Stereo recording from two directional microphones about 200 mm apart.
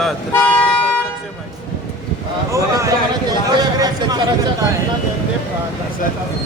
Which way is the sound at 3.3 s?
20° right (ahead or behind).